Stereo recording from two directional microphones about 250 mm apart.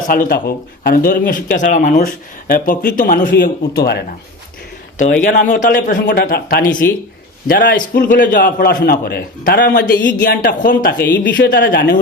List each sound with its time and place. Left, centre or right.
0.1 s speech: left
4.9 s speech: left
10.9 s speech: centre
11.2 s speech: left